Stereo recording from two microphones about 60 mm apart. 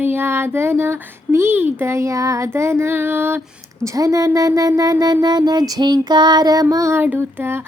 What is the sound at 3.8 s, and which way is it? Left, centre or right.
A woman's voice, right.